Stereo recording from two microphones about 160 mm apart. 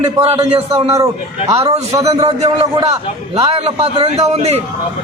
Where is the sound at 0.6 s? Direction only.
35° right (ahead or behind).